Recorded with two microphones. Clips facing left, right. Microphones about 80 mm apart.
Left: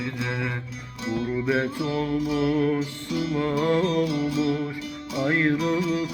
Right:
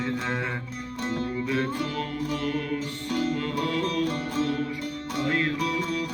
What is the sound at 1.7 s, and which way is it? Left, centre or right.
Music, right.